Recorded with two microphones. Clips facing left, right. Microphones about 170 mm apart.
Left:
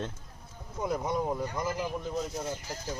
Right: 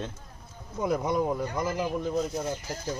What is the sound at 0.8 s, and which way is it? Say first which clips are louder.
Speech: right 4 dB; 85° right.